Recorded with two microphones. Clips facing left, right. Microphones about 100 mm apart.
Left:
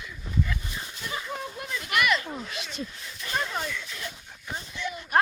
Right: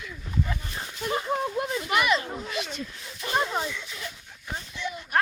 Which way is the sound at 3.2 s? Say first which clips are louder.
Right 4 dB; 35° right (ahead or behind).